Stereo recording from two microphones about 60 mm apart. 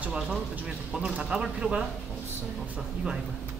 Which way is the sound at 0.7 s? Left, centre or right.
Centre.